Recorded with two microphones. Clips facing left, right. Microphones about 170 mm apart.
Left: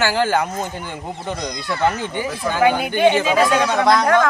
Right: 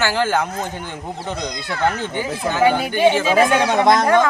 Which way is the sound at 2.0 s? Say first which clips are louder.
Even; 15° left (ahead or behind).